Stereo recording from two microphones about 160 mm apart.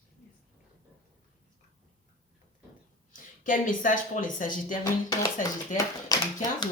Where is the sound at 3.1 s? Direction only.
55° left (ahead or behind).